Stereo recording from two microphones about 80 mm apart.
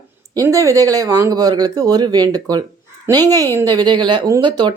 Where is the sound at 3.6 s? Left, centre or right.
Right.